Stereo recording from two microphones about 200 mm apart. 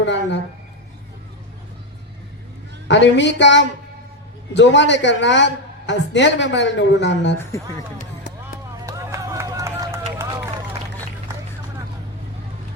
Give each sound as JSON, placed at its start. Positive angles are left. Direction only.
{"t": 0.0, "sound": "a woman's voice", "side_deg": 65}
{"t": 2.8, "sound": "a woman's voice", "side_deg": 65}
{"t": 7.3, "sound": "speech", "side_deg": 15}
{"t": 8.9, "sound": "run", "side_deg": -15}